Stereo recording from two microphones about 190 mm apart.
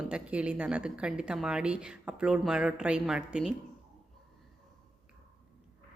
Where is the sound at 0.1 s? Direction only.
5° right (ahead or behind).